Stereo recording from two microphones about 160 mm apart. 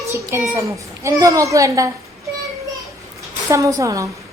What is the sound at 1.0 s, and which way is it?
Speech, 20° right (ahead or behind).